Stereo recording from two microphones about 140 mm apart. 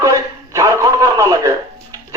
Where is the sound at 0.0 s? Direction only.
25° right (ahead or behind).